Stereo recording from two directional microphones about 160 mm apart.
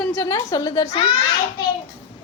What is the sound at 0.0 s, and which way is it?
Speech, 10° left (ahead or behind).